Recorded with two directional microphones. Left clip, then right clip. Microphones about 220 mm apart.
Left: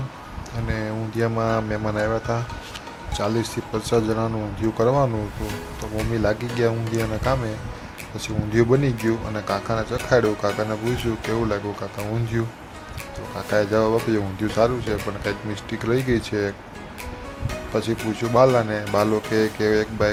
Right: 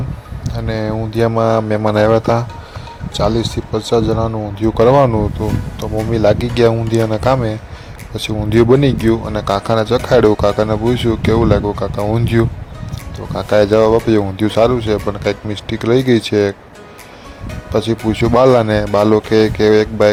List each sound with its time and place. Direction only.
0.4 s speech: 30° right (ahead or behind)
3.1 s speech: 25° right (ahead or behind)
4.7 s speech: 35° right (ahead or behind)
17.7 s speech: 30° right (ahead or behind)